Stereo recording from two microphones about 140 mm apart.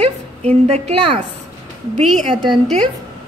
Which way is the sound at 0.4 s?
50° right (ahead or behind).